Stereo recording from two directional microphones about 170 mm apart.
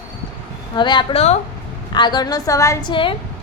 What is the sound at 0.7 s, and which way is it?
A woman's voice, 25° left (ahead or behind).